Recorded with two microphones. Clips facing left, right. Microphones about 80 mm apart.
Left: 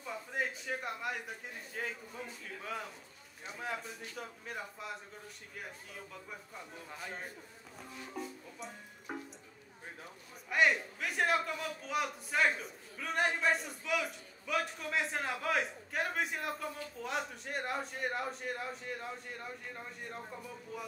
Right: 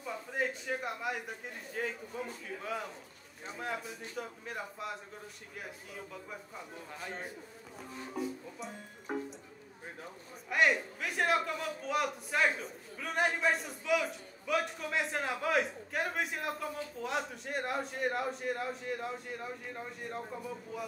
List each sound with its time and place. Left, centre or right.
0.0 s a man's voice: centre
10.5 s a man's voice: centre